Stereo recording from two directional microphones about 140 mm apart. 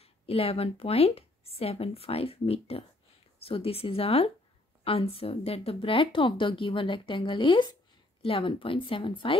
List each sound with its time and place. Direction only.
0.0 s a woman's voice: 45° left (ahead or behind)